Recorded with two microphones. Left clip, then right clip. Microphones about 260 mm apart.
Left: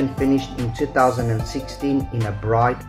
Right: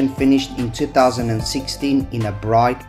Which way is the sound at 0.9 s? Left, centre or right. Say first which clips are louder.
Right 3 dB; right.